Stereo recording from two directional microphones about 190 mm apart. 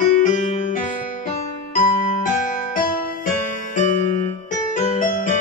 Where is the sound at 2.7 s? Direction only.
45° left (ahead or behind).